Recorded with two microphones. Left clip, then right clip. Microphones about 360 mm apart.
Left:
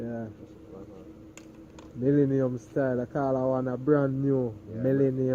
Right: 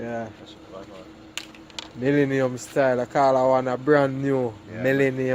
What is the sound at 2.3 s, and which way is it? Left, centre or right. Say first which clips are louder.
Speech: right 4 dB; right.